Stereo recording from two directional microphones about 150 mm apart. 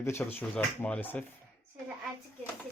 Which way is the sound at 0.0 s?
15° left (ahead or behind).